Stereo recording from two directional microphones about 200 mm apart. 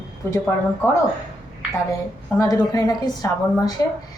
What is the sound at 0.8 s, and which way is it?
Speech, 10° left (ahead or behind).